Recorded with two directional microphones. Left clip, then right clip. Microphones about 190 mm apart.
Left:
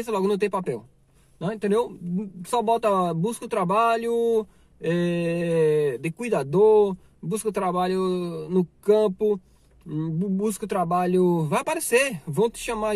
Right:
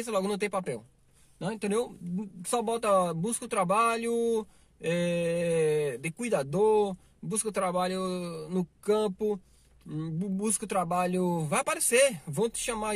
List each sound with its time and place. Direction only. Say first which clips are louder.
0.0 s speech: left 6 dB; 10° right (ahead or behind)